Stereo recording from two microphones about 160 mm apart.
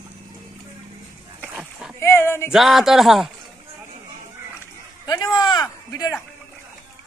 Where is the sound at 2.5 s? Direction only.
Centre (ahead or behind).